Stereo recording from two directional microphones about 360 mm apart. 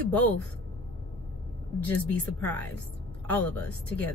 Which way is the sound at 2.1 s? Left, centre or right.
Centre.